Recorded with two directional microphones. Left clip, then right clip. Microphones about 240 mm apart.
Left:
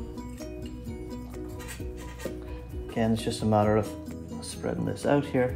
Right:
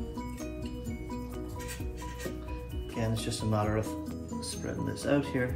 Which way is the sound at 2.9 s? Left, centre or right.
Left.